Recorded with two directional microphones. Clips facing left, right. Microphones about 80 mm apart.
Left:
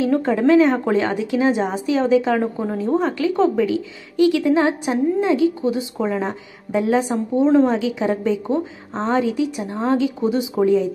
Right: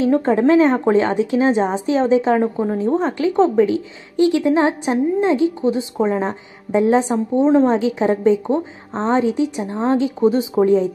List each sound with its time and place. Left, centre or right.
0.0 s a woman's voice: right
2.5 s a woman's voice: centre
2.8 s a woman's voice: right